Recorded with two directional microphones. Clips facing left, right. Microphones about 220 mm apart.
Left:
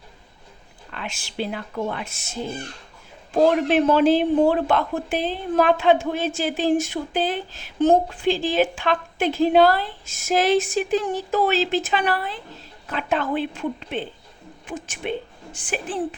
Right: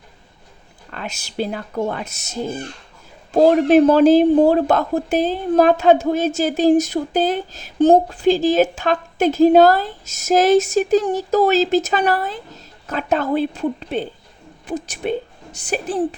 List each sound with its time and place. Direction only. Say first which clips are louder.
0.9 s a woman's voice: right 3 dB; 40° right (ahead or behind)